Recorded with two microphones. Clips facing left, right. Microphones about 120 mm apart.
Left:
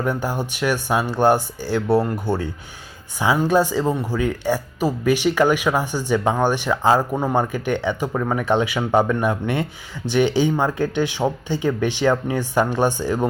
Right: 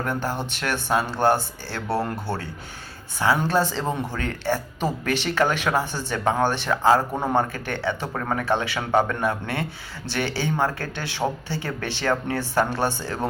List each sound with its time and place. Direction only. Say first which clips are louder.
0.0 s speech: left 3 dB; 15° left (ahead or behind)
3.2 s speech: left 3 dB; 10° left (ahead or behind)